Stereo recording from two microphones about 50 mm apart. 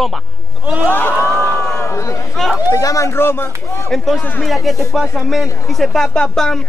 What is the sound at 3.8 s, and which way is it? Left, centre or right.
Speech, centre.